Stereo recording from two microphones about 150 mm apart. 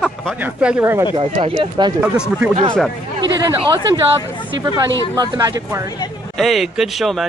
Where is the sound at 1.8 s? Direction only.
30° right (ahead or behind).